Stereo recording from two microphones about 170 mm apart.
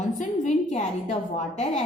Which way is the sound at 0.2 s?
45° left (ahead or behind).